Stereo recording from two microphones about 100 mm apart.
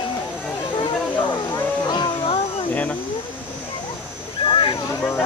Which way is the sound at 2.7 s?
15° left (ahead or behind).